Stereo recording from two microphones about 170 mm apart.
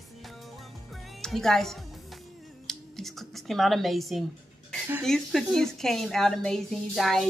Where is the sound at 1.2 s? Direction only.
5° left (ahead or behind).